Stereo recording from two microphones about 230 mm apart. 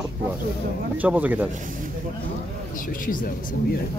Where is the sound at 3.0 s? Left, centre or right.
Left.